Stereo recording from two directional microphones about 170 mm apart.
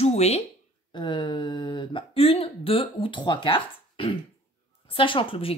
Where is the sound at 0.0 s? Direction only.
40° left (ahead or behind).